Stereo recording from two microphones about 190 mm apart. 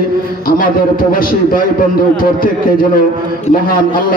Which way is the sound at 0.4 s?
50° left (ahead or behind).